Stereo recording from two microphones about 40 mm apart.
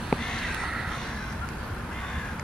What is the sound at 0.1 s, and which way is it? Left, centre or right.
Crow, centre.